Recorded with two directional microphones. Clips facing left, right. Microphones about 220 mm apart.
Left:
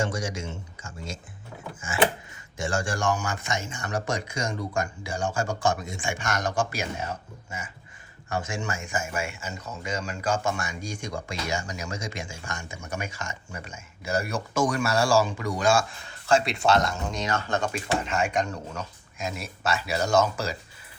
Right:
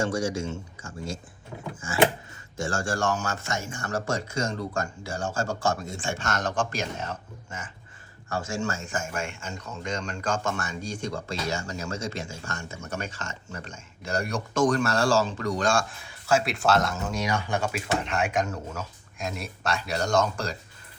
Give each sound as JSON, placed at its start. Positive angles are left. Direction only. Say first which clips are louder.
{"t": 0.0, "sound": "speech", "louder": "right 3 dB", "side_deg": 20}
{"t": 16.0, "sound": "speech", "louder": "left 1 dB", "side_deg": -5}